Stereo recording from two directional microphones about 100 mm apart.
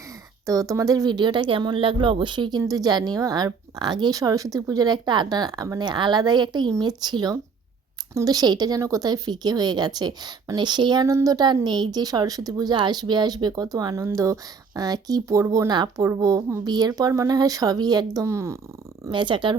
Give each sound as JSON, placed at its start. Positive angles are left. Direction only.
{"t": 0.4, "sound": "a woman's voice", "side_deg": -35}
{"t": 2.6, "sound": "speech", "side_deg": -35}
{"t": 5.8, "sound": "a woman's voice", "side_deg": -50}
{"t": 11.0, "sound": "a woman's voice", "side_deg": -35}
{"t": 15.7, "sound": "a woman's voice", "side_deg": -45}
{"t": 16.0, "sound": "speech", "side_deg": -30}
{"t": 19.1, "sound": "a woman's voice", "side_deg": -55}